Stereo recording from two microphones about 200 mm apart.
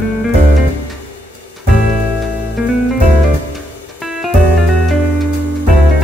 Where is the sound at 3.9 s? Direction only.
Centre (ahead or behind).